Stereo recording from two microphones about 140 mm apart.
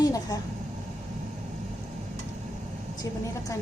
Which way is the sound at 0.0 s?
25° left (ahead or behind).